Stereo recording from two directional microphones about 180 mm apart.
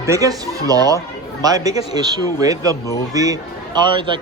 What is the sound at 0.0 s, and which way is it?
Speech, 15° right (ahead or behind).